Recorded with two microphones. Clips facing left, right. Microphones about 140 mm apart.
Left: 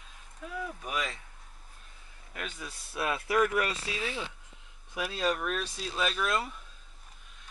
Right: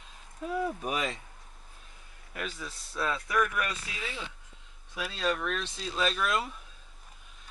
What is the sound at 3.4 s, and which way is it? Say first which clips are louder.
Speech: left 3 dB; 25° left (ahead or behind).